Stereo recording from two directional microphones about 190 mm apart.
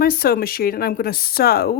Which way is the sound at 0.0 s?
50° left (ahead or behind).